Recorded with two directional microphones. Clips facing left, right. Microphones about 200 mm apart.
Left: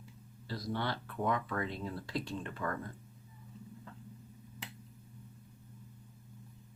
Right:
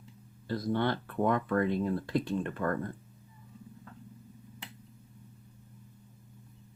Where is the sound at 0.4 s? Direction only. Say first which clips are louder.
Right 7 dB; 55° right (ahead or behind).